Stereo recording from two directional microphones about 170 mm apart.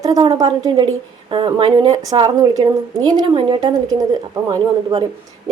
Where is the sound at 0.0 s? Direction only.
20° right (ahead or behind).